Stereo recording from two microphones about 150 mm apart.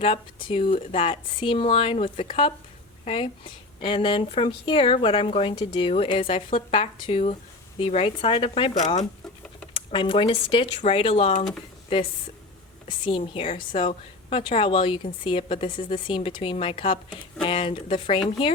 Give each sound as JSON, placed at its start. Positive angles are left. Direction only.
{"t": 0.0, "sound": "a woman's voice", "side_deg": 35}
{"t": 3.0, "sound": "a woman's voice", "side_deg": 40}
{"t": 8.8, "sound": "speech", "side_deg": 50}
{"t": 9.7, "sound": "a woman's voice", "side_deg": 35}
{"t": 13.1, "sound": "a woman's voice", "side_deg": 35}